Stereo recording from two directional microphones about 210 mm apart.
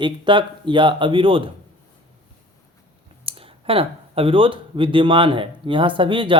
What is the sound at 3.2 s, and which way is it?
Speech, 25° right (ahead or behind).